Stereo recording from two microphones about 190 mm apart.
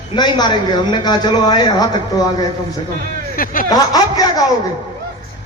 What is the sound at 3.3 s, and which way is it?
Speech, 50° left (ahead or behind).